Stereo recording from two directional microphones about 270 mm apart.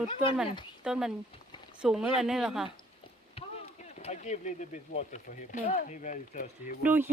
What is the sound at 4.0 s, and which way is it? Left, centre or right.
Speech, left.